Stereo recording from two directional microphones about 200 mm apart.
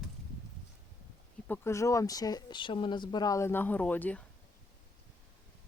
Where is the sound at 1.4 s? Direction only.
10° left (ahead or behind).